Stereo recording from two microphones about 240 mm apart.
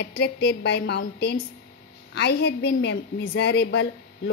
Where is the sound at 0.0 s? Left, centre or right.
Left.